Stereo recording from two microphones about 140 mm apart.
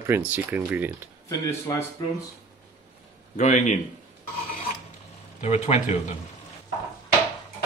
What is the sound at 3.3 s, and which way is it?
Speech, 60° left (ahead or behind).